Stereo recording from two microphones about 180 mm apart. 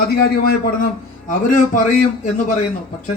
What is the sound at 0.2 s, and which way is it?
Speech, 60° left (ahead or behind).